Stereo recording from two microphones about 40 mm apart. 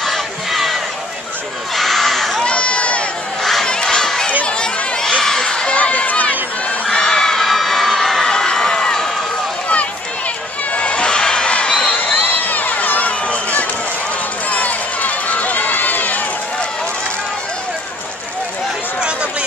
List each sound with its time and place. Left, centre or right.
0.0 s battle cry: centre
1.8 s a sound: centre
2.4 s crowd: left
3.6 s crowd: centre
5.7 s crowd: left
6.9 s crowd: centre
10.7 s a sound: left
11.9 s crowd: left
13.3 s run: left